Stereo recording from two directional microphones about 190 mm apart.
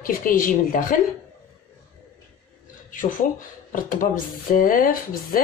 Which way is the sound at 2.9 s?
45° left (ahead or behind).